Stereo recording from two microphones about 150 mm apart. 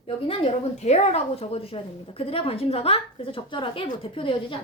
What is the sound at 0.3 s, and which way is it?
A woman's voice, 45° left (ahead or behind).